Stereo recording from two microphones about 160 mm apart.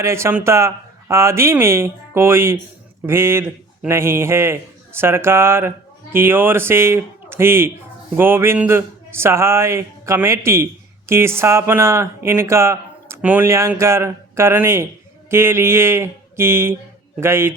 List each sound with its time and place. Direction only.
0.0 s speech: 15° right (ahead or behind)